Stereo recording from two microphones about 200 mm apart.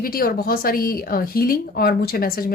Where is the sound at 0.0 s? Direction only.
45° left (ahead or behind).